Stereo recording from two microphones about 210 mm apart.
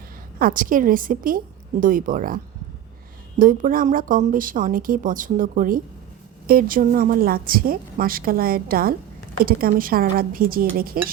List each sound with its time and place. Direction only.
0.3 s a woman's voice: 40° right (ahead or behind)